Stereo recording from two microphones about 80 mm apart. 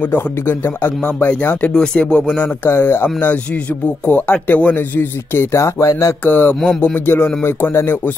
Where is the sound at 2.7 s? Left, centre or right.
Left.